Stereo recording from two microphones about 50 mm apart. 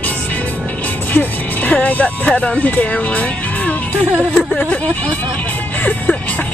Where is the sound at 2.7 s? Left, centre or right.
Left.